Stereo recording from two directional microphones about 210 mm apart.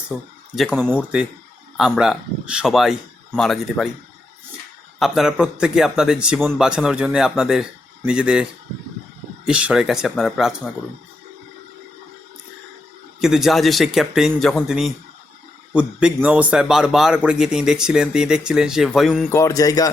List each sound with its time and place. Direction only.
0.1 s speech: 10° right (ahead or behind)
4.9 s speech: centre (ahead or behind)
13.1 s speech: centre (ahead or behind)
19.3 s speech: 15° left (ahead or behind)